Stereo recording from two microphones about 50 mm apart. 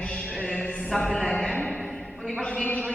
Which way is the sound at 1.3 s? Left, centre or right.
Left.